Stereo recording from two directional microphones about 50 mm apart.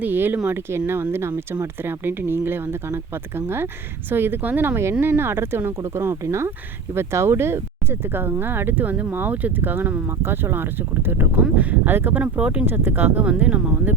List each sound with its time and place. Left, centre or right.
0.0 s speech: right
4.8 s speech: right
11.3 s speech: right
11.9 s speech: right
12.1 s speech: right
12.6 s speech: right